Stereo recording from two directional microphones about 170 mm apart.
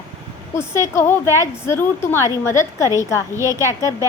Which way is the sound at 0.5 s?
15° left (ahead or behind).